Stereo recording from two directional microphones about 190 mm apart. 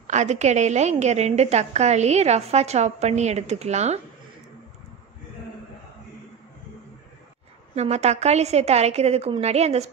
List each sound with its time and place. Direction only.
0.0 s a woman's voice: 40° right (ahead or behind)
7.7 s a woman's voice: 35° right (ahead or behind)